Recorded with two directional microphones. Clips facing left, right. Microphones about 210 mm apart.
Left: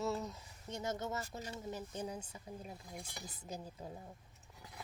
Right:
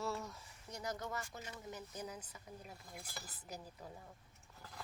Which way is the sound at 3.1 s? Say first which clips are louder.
Left 2 dB; 5° right (ahead or behind).